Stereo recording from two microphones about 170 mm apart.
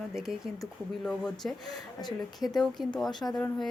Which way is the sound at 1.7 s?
25° left (ahead or behind).